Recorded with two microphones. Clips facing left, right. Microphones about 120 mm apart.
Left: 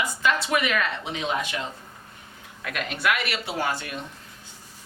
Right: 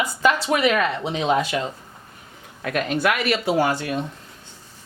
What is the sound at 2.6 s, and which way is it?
Speech, 40° right (ahead or behind).